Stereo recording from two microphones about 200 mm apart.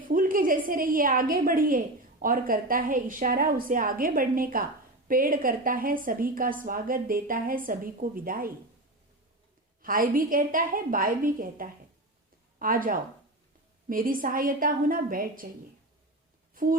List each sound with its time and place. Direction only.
0.1 s a woman's voice: 45° right (ahead or behind)
9.8 s a woman's voice: 45° right (ahead or behind)